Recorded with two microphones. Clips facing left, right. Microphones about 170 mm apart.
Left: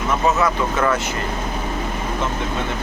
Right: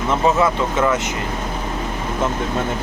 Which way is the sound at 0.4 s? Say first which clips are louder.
Right 1 dB; 20° right (ahead or behind).